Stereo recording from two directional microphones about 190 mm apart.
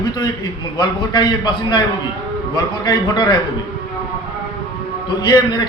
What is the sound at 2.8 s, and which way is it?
Speech, 20° left (ahead or behind).